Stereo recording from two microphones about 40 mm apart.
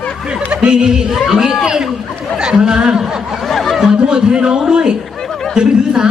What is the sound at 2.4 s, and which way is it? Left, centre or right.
Speech, centre.